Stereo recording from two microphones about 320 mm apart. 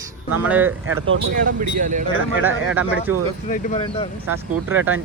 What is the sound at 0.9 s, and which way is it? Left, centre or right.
Speech, right.